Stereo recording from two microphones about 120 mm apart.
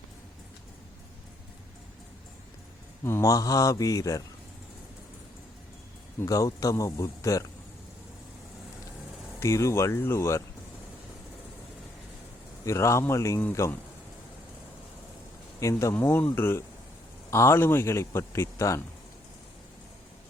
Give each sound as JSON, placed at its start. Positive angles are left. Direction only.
{"t": 3.0, "sound": "speech", "side_deg": 25}
{"t": 6.1, "sound": "speech", "side_deg": 25}
{"t": 9.4, "sound": "speech", "side_deg": 25}
{"t": 12.6, "sound": "speech", "side_deg": 25}
{"t": 15.6, "sound": "speech", "side_deg": 25}